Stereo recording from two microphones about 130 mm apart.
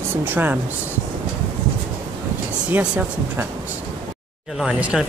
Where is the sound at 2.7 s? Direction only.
10° right (ahead or behind).